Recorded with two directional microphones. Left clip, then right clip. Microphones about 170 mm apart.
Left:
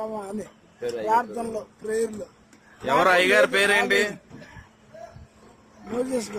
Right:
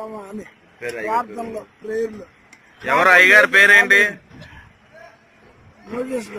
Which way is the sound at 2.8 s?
5° left (ahead or behind).